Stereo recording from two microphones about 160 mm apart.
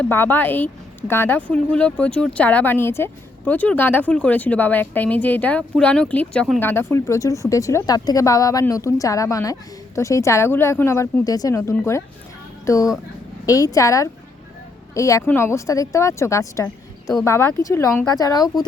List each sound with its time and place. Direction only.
0.0 s speech: 15° left (ahead or behind)